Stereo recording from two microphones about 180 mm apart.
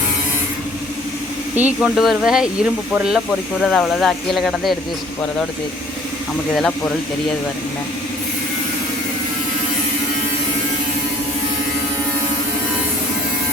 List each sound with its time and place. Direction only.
1.5 s speech: 5° right (ahead or behind)
6.6 s speech: 5° left (ahead or behind)